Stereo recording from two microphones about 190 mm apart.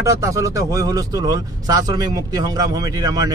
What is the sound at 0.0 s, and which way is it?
Speech, 15° right (ahead or behind).